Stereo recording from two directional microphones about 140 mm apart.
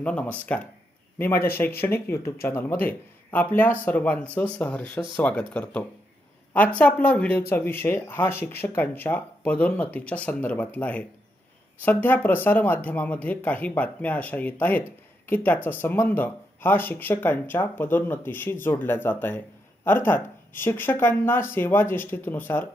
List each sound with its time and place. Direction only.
0.0 s speech: 10° left (ahead or behind)